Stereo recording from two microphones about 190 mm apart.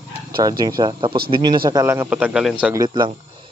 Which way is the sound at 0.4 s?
20° right (ahead or behind).